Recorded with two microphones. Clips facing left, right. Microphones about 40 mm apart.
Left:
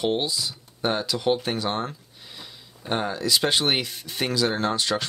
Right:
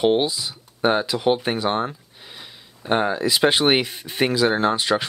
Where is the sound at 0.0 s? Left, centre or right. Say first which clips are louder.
Right 6 dB; right.